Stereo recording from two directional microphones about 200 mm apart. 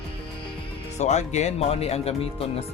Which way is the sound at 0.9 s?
35° left (ahead or behind).